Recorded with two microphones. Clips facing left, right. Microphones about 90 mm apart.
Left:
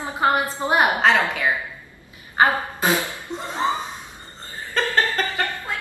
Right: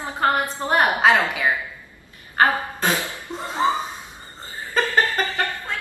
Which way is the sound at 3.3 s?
5° right (ahead or behind).